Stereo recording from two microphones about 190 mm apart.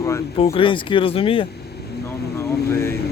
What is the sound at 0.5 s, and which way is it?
Speech, 25° left (ahead or behind).